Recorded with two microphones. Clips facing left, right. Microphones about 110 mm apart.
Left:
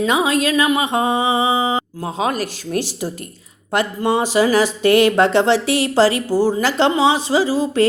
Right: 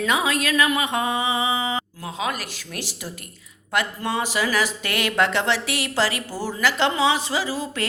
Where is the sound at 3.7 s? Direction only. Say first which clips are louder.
Left 7 dB; 25° left (ahead or behind).